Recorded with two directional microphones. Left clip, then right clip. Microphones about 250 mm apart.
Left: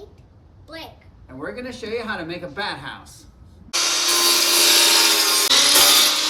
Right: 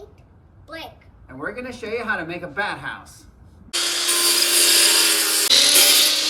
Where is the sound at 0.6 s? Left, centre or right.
Centre.